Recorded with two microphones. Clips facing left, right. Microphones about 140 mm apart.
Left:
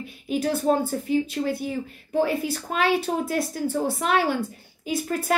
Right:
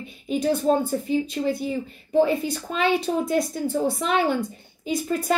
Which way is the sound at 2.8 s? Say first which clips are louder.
Right 1 dB; 5° left (ahead or behind).